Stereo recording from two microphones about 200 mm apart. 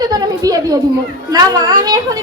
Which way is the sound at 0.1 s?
20° right (ahead or behind).